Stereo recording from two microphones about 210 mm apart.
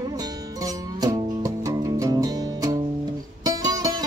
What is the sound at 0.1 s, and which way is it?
Music, 15° right (ahead or behind).